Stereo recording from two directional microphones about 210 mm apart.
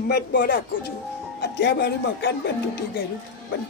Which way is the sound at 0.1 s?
45° left (ahead or behind).